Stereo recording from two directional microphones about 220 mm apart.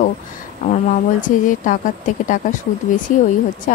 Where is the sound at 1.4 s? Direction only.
35° left (ahead or behind).